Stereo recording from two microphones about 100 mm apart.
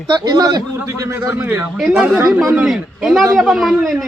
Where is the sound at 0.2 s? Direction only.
45° right (ahead or behind).